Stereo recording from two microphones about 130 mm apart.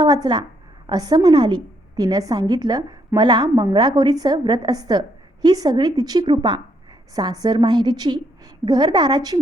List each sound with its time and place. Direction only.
0.0 s a woman's voice: 30° right (ahead or behind)